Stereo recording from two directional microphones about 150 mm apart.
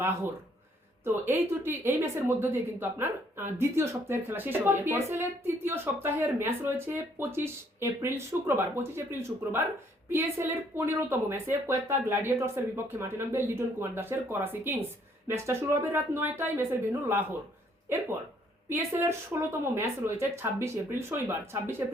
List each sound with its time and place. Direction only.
1.0 s a woman's voice: 15° right (ahead or behind)
18.7 s a woman's voice: 15° right (ahead or behind)